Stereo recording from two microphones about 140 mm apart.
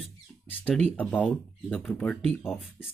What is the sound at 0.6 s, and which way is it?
Speech, 10° left (ahead or behind).